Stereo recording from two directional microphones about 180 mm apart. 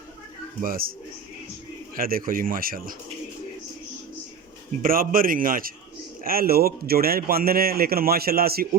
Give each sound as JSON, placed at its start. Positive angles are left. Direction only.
{"t": 0.6, "sound": "a man's voice", "side_deg": -50}
{"t": 2.0, "sound": "a man's voice", "side_deg": -55}
{"t": 4.8, "sound": "a man's voice", "side_deg": -50}